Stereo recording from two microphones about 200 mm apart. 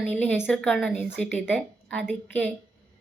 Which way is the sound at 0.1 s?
10° left (ahead or behind).